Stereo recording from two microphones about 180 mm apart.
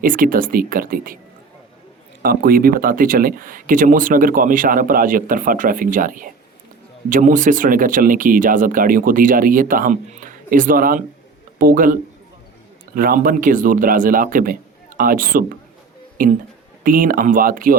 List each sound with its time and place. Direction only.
0.0 s speech: 50° right (ahead or behind)
2.2 s speech: 55° right (ahead or behind)
13.0 s speech: 50° right (ahead or behind)